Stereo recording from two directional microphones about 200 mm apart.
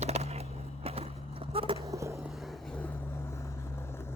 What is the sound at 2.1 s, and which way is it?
Vehicle, centre (ahead or behind).